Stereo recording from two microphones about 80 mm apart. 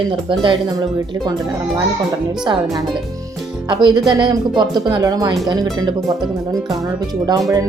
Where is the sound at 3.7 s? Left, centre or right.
Right.